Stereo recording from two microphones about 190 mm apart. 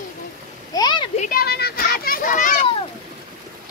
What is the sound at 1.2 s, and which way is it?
A child's voice, 50° left (ahead or behind).